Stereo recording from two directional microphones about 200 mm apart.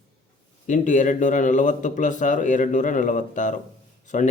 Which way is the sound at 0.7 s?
40° left (ahead or behind).